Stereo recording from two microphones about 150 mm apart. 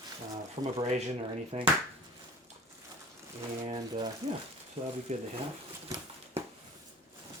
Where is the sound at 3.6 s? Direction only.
35° right (ahead or behind).